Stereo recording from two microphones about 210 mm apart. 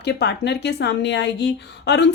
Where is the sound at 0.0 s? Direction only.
50° left (ahead or behind).